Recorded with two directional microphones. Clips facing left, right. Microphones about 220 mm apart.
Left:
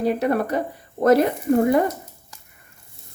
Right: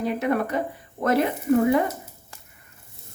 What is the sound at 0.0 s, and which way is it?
Speech, 35° left (ahead or behind).